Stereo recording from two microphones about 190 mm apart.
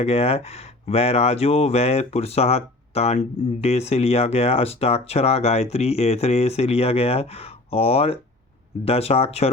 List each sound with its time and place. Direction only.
0.0 s speech: 30° left (ahead or behind)